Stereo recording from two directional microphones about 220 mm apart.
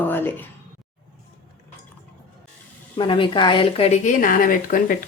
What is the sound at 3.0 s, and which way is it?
A woman's voice, 20° left (ahead or behind).